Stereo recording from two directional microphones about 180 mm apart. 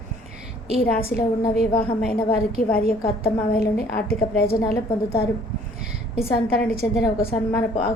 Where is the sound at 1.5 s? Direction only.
55° left (ahead or behind).